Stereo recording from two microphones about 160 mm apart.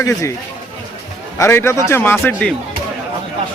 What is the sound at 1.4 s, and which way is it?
A man's voice, 15° left (ahead or behind).